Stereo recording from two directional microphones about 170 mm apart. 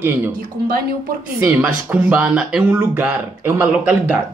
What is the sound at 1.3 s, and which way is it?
A man's voice, 10° right (ahead or behind).